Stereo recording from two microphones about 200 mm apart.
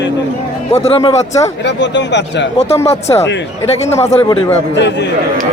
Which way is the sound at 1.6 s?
60° left (ahead or behind).